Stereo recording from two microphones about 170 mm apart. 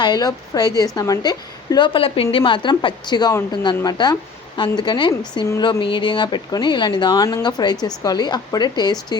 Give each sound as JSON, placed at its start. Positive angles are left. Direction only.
{"t": 0.0, "sound": "speech", "side_deg": 25}